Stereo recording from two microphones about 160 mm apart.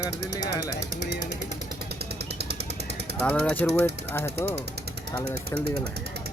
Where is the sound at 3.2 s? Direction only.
5° left (ahead or behind).